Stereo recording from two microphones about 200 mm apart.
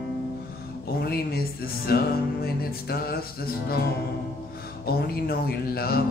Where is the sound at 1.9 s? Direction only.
50° left (ahead or behind).